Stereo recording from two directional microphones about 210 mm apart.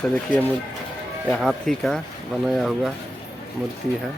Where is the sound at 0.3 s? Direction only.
40° left (ahead or behind).